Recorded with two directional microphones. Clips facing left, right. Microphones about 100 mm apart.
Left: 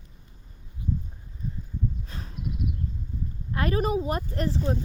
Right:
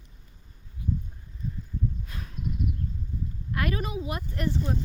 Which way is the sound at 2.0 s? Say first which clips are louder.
Left 1 dB; 30° left (ahead or behind).